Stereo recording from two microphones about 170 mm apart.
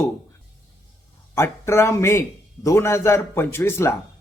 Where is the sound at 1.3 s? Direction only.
15° left (ahead or behind).